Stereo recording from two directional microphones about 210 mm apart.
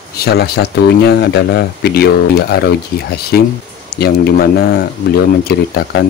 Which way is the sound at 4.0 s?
45° left (ahead or behind).